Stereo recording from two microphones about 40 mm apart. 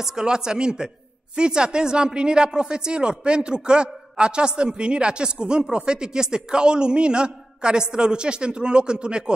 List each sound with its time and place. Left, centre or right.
0.0 s a woman's voice: centre